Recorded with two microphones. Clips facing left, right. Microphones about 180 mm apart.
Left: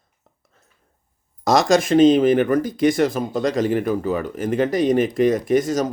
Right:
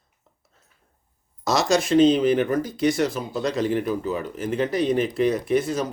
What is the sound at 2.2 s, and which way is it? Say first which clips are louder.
Speech: left 4 dB; 55° left (ahead or behind).